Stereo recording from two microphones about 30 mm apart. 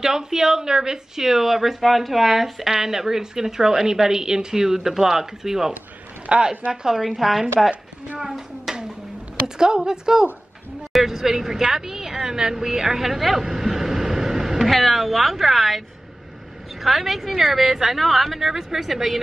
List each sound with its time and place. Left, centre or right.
0.0 s a woman's voice: centre
6.3 s speech: right
6.7 s a woman's voice: right
7.0 s speech: centre
8.2 s a woman's voice: centre
10.9 s a woman's voice: centre
13.4 s vehicle: centre
14.7 s speech: centre
16.8 s a woman's voice: centre
18.0 s speech: centre
18.5 s a woman's voice: centre